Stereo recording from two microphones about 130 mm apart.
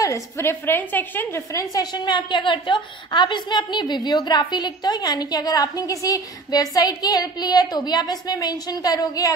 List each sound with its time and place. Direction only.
0.0 s a woman's voice: 20° left (ahead or behind)